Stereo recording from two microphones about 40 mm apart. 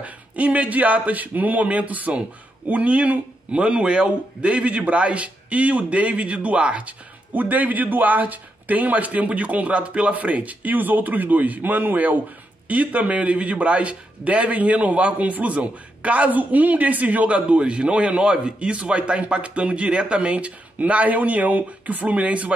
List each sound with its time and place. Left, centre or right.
0.0 s a man's voice: right
12.6 s a man's voice: right